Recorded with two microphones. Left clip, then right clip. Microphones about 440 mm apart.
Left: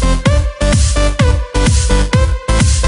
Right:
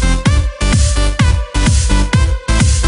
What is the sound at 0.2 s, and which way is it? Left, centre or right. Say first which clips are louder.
Music: left 3 dB; centre.